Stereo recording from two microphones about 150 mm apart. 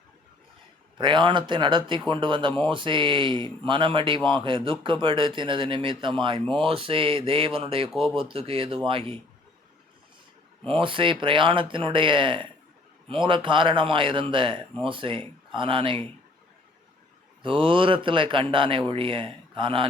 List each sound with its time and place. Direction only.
0.9 s speech: 30° right (ahead or behind)
10.7 s speech: 35° right (ahead or behind)
17.4 s speech: 35° right (ahead or behind)